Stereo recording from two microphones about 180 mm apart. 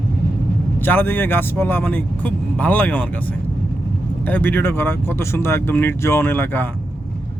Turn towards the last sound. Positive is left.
turn(degrees=10)  # may be behind; listen again after turning